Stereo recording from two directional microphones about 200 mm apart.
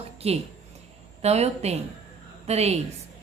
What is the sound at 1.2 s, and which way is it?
A woman's voice, 30° right (ahead or behind).